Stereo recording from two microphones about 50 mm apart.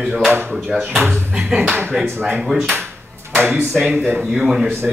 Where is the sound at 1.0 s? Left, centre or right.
Right.